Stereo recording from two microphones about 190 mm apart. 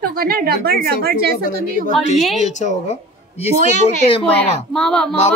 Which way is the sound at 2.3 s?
40° left (ahead or behind).